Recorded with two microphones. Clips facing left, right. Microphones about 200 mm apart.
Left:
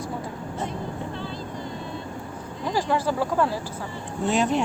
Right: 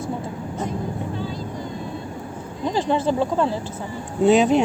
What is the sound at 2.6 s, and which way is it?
Speech, 20° right (ahead or behind).